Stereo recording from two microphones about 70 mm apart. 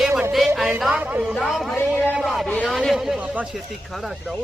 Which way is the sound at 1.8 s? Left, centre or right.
Left.